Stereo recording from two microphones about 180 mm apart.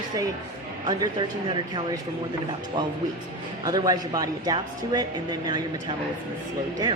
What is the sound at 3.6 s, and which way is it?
Speech, 20° right (ahead or behind).